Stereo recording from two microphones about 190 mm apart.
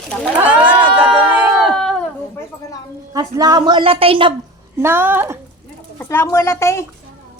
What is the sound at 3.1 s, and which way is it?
A woman's voice, 20° right (ahead or behind).